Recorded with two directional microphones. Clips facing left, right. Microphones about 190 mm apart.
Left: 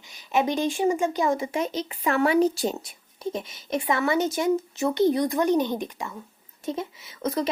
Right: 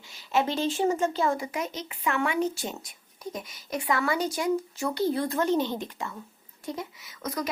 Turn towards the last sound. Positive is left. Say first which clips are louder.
# left 6 dB
turn(degrees=25)  # may be behind; listen again after turning